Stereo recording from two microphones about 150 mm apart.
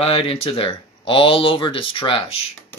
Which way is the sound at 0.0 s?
40° left (ahead or behind).